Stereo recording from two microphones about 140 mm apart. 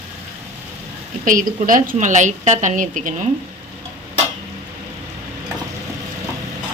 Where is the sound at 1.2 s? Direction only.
75° right (ahead or behind).